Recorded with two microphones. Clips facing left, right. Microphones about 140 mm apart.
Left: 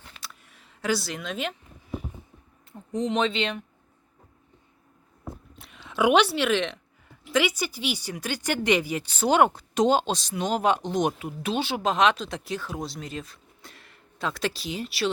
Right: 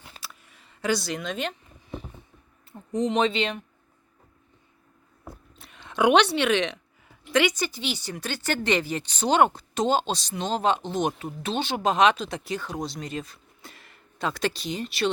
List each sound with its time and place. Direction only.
0.2 s a sound: centre (ahead or behind)
2.7 s speech: centre (ahead or behind)
5.5 s speech: centre (ahead or behind)